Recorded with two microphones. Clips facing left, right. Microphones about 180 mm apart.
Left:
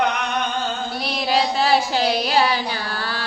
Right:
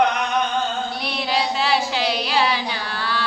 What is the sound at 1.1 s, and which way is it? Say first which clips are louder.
Child singing: left 4 dB; 40° left (ahead or behind).